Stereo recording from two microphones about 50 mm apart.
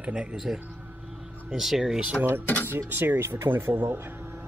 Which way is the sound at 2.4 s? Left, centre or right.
Left.